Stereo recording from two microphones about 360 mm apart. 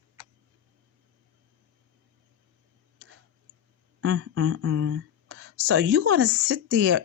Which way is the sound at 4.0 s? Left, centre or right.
Right.